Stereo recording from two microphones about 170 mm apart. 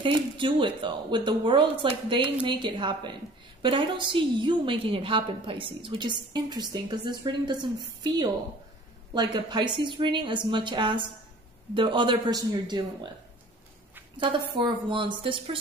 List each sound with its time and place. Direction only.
0.0 s a woman's voice: 30° right (ahead or behind)
14.2 s a woman's voice: 30° right (ahead or behind)